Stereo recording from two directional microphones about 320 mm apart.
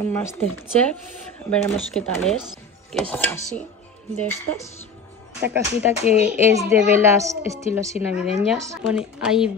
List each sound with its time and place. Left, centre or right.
0.0 s a woman's voice: centre
5.5 s a child's voice: centre